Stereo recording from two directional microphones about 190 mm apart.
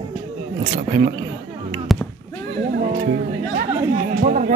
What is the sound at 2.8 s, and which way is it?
Music, 45° right (ahead or behind).